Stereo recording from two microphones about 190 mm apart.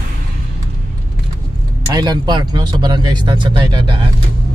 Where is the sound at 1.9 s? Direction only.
20° right (ahead or behind).